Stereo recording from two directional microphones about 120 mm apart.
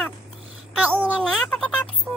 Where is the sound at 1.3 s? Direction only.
5° left (ahead or behind).